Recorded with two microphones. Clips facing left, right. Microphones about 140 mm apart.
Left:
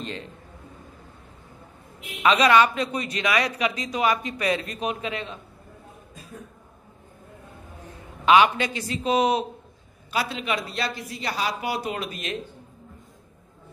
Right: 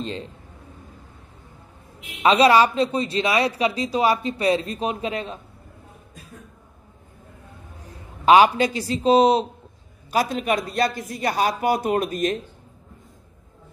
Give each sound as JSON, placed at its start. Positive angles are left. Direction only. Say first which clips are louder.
{"t": 0.0, "sound": "a man's voice", "louder": "right 4 dB", "side_deg": -30}
{"t": 2.2, "sound": "speech", "louder": "right 3 dB", "side_deg": -30}
{"t": 8.3, "sound": "speech", "louder": "right 4 dB", "side_deg": -35}
{"t": 10.1, "sound": "speech", "louder": "right 5 dB", "side_deg": -45}